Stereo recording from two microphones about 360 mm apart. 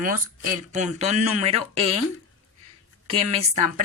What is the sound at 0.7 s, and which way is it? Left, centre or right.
Speech, centre.